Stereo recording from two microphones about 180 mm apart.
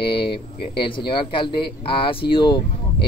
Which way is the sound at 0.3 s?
30° left (ahead or behind).